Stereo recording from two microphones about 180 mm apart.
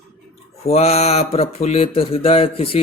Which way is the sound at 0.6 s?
35° left (ahead or behind).